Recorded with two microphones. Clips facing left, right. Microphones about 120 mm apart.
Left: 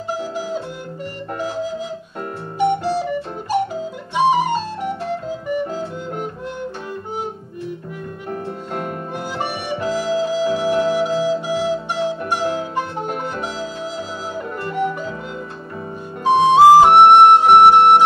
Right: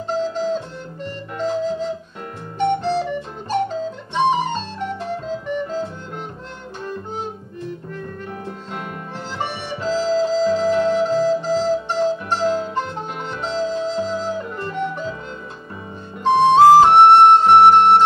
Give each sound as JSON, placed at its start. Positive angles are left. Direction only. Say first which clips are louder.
{"t": 0.1, "sound": "music", "louder": "right 4 dB", "side_deg": 10}
{"t": 2.6, "sound": "music", "louder": "left 1 dB", "side_deg": 10}
{"t": 4.1, "sound": "flute", "louder": "left 3 dB", "side_deg": 10}
{"t": 8.3, "sound": "music", "louder": "left 4 dB", "side_deg": 45}
{"t": 9.9, "sound": "music", "louder": "right 3 dB", "side_deg": 15}
{"t": 10.8, "sound": "flute", "louder": "right 1 dB", "side_deg": 10}
{"t": 13.4, "sound": "music", "louder": "right 4 dB", "side_deg": 10}
{"t": 14.8, "sound": "music", "louder": "left 3 dB", "side_deg": 50}
{"t": 16.3, "sound": "flute", "louder": "left 1 dB", "side_deg": 10}